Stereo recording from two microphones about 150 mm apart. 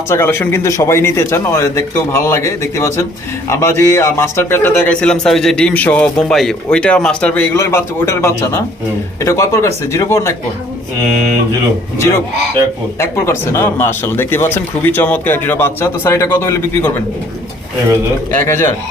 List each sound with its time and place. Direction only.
0.1 s speech: 15° left (ahead or behind)
13.0 s speech: 20° left (ahead or behind)
18.4 s speech: 15° left (ahead or behind)